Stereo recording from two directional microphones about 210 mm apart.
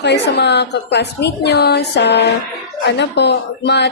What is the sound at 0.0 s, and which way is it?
A woman's voice, 55° left (ahead or behind).